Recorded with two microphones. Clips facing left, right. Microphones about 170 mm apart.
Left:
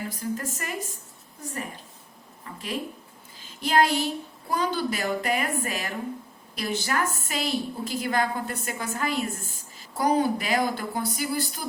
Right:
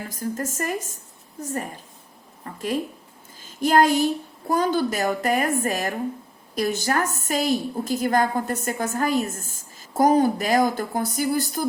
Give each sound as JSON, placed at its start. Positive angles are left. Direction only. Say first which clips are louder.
{"t": 0.2, "sound": "a woman's voice", "louder": "right 8 dB", "side_deg": -45}
{"t": 2.4, "sound": "a woman's voice", "louder": "right 6 dB", "side_deg": -45}